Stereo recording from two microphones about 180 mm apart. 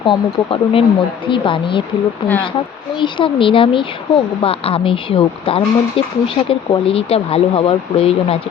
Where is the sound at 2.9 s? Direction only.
25° left (ahead or behind).